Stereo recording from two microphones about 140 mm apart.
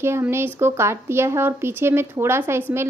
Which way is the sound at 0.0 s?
15° right (ahead or behind).